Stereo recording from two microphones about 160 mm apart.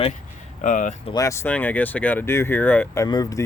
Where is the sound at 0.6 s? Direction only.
55° left (ahead or behind).